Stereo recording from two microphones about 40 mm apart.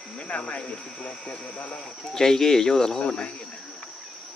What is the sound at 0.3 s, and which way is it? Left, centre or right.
Speech, left.